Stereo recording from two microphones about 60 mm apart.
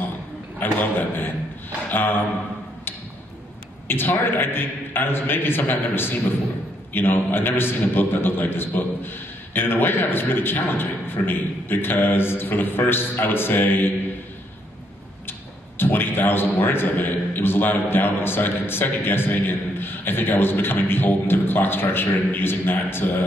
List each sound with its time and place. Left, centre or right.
0.6 s a man's voice: left
1.9 s a sound: left
3.8 s a man's voice: left
15.8 s a man's voice: left